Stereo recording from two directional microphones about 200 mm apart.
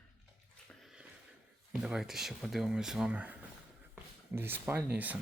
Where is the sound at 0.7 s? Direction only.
Centre (ahead or behind).